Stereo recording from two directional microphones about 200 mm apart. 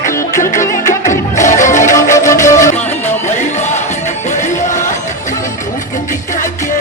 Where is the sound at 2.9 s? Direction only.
35° left (ahead or behind).